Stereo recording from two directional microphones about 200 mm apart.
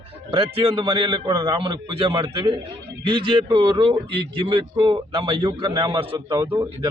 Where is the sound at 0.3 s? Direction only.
25° right (ahead or behind).